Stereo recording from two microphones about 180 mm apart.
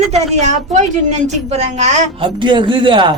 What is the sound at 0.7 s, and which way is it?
A woman's voice, 40° right (ahead or behind).